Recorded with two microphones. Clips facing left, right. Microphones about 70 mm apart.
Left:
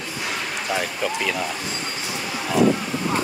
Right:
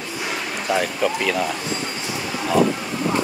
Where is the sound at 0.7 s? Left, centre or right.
Centre.